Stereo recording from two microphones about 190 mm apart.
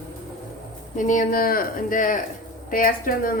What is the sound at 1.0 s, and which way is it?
Speech, 45° left (ahead or behind).